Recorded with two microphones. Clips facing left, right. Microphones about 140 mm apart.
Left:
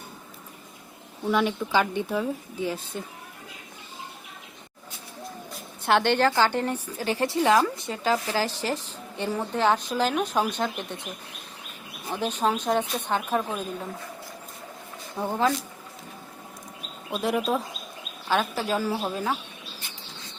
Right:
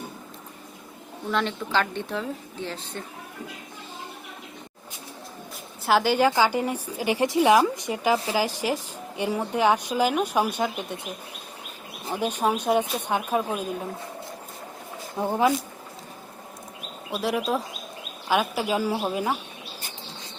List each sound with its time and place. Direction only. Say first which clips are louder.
1.3 s speech: left 2 dB; 10° left (ahead or behind)
5.8 s a woman's voice: right 1 dB; 5° right (ahead or behind)
12.1 s a woman's voice: right 1 dB; 10° right (ahead or behind)
15.2 s a woman's voice: right 2 dB; 15° right (ahead or behind)
17.1 s speech: even; centre (ahead or behind)
18.3 s a woman's voice: right 1 dB; 10° right (ahead or behind)